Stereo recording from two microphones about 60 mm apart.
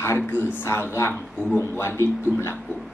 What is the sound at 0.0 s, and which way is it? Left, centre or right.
Speech, left.